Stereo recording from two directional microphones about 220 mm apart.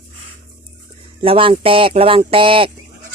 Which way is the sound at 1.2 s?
25° right (ahead or behind).